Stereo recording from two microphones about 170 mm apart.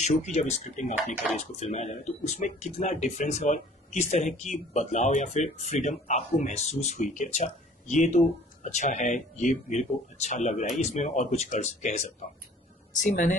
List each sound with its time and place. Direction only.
0.0 s speech: 45° left (ahead or behind)